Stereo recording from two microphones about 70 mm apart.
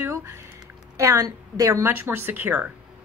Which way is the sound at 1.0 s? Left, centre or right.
Right.